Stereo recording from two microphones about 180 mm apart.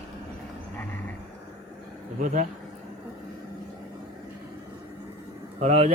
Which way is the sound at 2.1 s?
45° right (ahead or behind).